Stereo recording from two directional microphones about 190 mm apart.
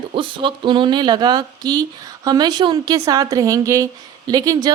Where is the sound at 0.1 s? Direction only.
25° right (ahead or behind).